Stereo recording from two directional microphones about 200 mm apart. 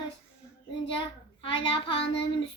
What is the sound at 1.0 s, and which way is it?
A child's voice, 25° left (ahead or behind).